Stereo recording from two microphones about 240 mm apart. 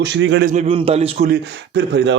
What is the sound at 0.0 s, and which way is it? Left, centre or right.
Speech, right.